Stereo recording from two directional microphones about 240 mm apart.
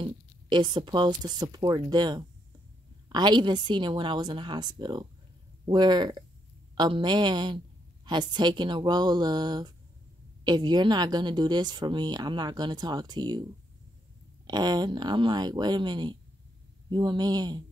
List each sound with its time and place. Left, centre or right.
0.0 s a woman's voice: centre